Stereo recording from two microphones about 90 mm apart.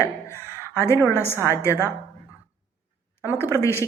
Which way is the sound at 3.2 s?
30° left (ahead or behind).